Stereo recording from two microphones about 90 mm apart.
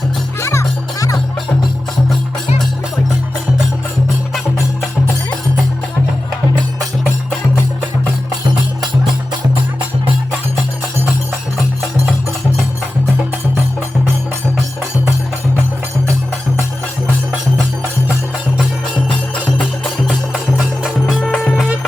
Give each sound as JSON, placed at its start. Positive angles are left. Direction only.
{"t": 0.3, "sound": "music", "side_deg": 30}
{"t": 20.8, "sound": "music", "side_deg": 0}